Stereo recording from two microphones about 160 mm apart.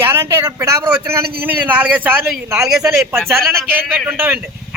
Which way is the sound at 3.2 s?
15° right (ahead or behind).